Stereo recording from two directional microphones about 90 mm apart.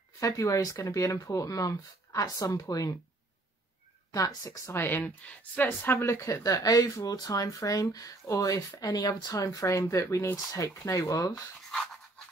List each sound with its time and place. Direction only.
0.2 s speech: 40° left (ahead or behind)
4.1 s speech: 45° left (ahead or behind)
4.7 s speech: 25° left (ahead or behind); by 11.5 s 40° left (ahead or behind)
11.7 s dog: centre (ahead or behind)